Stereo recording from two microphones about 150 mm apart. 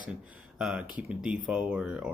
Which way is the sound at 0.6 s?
5° right (ahead or behind).